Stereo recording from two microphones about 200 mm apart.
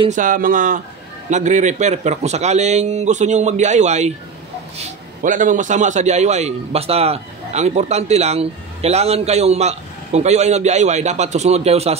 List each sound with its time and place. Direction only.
0.1 s a man's voice: 40° right (ahead or behind)